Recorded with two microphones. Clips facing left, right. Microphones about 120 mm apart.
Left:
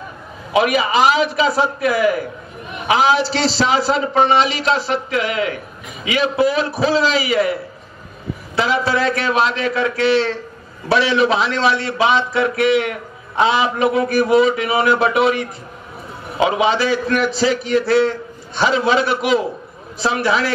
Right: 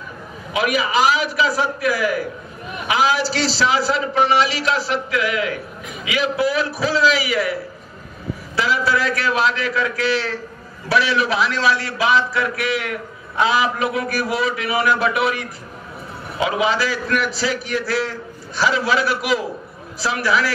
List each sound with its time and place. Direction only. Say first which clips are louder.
0.5 s a man's voice: left 4 dB; 25° left (ahead or behind)
8.5 s a man's voice: left 2 dB; 25° left (ahead or behind)